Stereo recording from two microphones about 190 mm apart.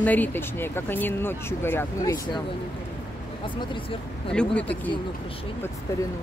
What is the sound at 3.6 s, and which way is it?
Speech, 25° left (ahead or behind).